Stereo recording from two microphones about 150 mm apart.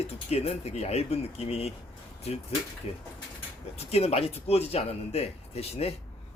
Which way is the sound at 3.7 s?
45° left (ahead or behind).